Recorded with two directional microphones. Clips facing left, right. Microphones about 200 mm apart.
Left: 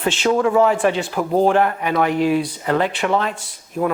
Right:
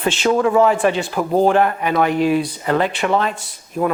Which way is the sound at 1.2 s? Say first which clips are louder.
Right 1 dB; 35° right (ahead or behind).